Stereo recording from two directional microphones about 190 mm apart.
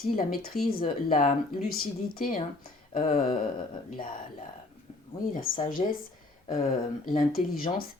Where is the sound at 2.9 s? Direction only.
35° left (ahead or behind).